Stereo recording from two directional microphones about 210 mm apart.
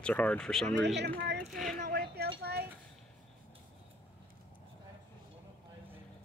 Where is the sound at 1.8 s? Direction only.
50° right (ahead or behind).